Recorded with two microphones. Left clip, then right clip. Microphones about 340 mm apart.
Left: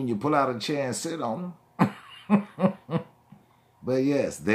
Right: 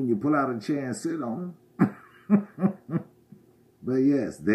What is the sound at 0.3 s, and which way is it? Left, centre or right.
Speech, centre.